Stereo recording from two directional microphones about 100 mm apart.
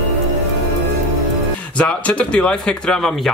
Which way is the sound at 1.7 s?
10° left (ahead or behind).